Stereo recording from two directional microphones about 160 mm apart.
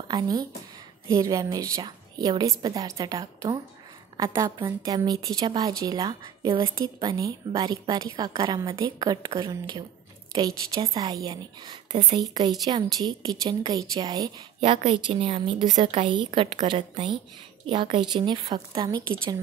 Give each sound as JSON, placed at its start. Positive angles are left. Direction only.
{"t": 0.1, "sound": "a woman's voice", "side_deg": -25}
{"t": 14.9, "sound": "a woman's voice", "side_deg": -35}